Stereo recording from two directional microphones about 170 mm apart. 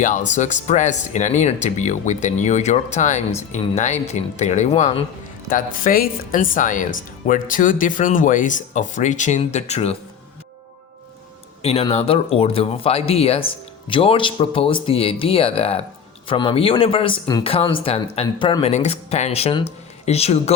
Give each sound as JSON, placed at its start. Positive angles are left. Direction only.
{"t": 0.0, "sound": "speech", "side_deg": 45}
{"t": 5.5, "sound": "speech", "side_deg": 55}
{"t": 11.6, "sound": "speech", "side_deg": 35}
{"t": 18.7, "sound": "speech", "side_deg": 40}